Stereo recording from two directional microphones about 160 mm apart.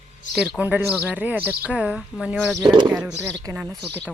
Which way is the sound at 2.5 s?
30° right (ahead or behind).